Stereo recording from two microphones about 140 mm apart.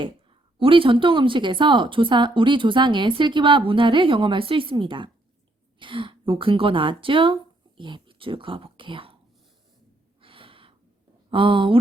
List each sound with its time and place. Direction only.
0.0 s speech: 40° right (ahead or behind)
10.2 s gasp: 40° right (ahead or behind)
11.3 s speech: 40° right (ahead or behind)